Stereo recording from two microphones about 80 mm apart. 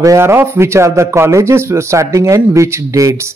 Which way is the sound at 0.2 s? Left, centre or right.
Right.